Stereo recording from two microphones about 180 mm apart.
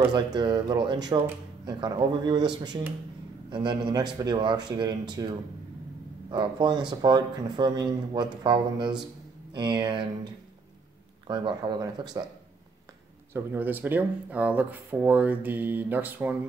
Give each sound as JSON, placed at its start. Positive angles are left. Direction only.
{"t": 0.1, "sound": "speech", "side_deg": -25}
{"t": 11.2, "sound": "speech", "side_deg": -25}
{"t": 13.3, "sound": "speech", "side_deg": -10}